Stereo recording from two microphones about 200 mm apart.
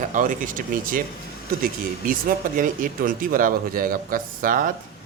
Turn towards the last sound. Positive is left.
turn(degrees=-45)  # may be behind; listen again after turning